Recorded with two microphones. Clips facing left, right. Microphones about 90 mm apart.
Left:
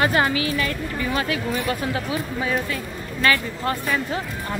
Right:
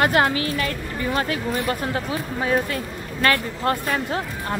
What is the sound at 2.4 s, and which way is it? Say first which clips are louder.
A woman's voice: right 6 dB; 50° right (ahead or behind).